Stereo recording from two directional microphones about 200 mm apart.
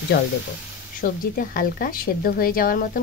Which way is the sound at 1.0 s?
45° left (ahead or behind).